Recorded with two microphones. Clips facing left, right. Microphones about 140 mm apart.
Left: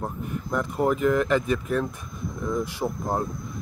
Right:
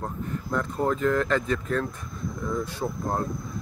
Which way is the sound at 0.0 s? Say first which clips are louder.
Left 1 dB; 10° left (ahead or behind).